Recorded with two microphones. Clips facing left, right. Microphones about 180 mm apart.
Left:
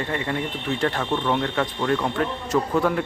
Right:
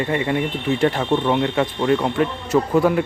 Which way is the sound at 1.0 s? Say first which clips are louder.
Right 5 dB; 20° right (ahead or behind).